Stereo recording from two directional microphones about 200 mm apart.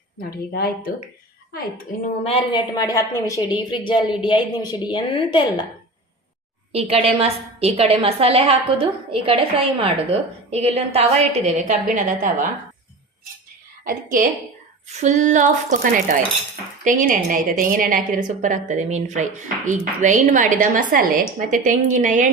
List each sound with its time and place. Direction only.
0.3 s a woman's voice: 50° left (ahead or behind)
2.2 s a woman's voice: 25° left (ahead or behind)
6.7 s a woman's voice: 30° right (ahead or behind)
13.8 s a woman's voice: 45° right (ahead or behind)